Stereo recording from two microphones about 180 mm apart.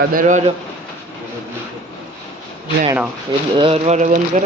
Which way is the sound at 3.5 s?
30° right (ahead or behind).